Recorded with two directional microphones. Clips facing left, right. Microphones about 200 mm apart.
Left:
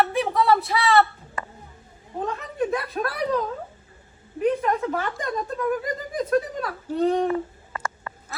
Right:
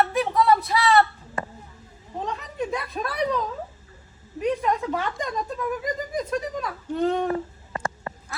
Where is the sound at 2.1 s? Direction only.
Centre (ahead or behind).